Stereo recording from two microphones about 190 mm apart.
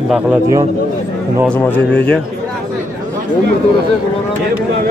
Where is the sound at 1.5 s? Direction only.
10° left (ahead or behind).